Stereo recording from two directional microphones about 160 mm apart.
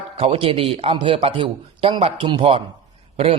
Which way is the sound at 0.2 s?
35° right (ahead or behind).